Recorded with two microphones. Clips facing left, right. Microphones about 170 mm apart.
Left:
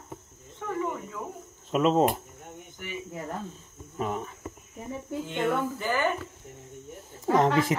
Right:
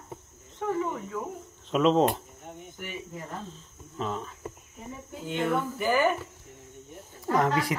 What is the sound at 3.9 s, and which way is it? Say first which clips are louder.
Speech: left 2 dB; 15° left (ahead or behind).